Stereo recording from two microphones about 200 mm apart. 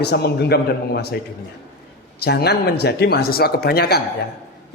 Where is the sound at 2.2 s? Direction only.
55° left (ahead or behind).